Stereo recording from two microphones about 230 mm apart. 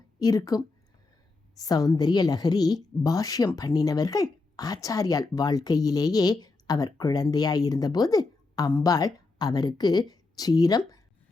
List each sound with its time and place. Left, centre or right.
0.2 s speech: centre